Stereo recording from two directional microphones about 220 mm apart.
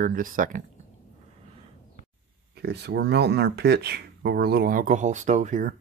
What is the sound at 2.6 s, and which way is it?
Speech, 50° right (ahead or behind).